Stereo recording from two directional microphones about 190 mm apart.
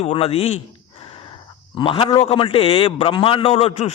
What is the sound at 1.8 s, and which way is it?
A man's voice, 25° left (ahead or behind).